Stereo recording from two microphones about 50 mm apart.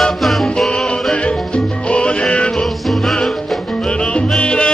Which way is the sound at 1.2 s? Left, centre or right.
Left.